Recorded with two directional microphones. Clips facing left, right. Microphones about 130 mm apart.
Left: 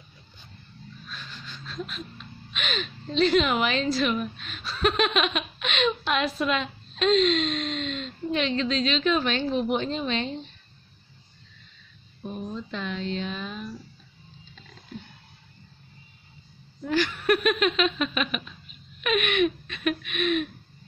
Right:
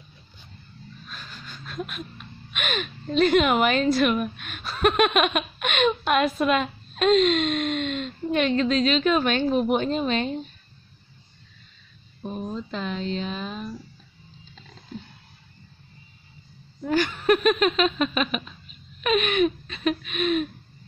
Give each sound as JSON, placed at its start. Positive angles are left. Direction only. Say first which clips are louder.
{"t": 1.0, "sound": "speech", "louder": "even", "side_deg": -45}
{"t": 12.2, "sound": "speech", "louder": "right 3 dB", "side_deg": -35}
{"t": 16.8, "sound": "laughter", "louder": "right 3 dB", "side_deg": -45}